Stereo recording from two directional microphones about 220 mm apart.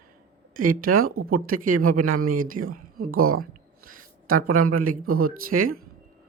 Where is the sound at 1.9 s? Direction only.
80° right.